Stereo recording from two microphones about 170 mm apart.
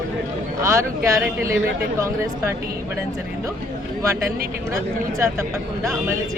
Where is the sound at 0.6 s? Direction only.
15° right (ahead or behind).